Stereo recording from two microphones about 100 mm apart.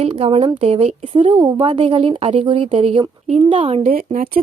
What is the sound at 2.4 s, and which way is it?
Speech, 60° right (ahead or behind).